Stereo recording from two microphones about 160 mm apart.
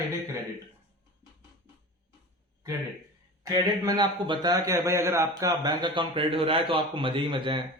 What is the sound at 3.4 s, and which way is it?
A man's voice, 20° right (ahead or behind).